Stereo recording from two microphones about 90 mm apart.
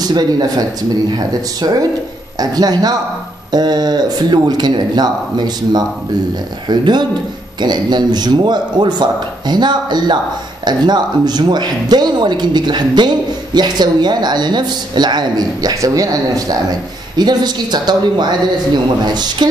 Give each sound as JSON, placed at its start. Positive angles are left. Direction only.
{"t": 0.1, "sound": "speech", "side_deg": -45}
{"t": 17.2, "sound": "speech", "side_deg": -50}
{"t": 19.4, "sound": "music", "side_deg": -55}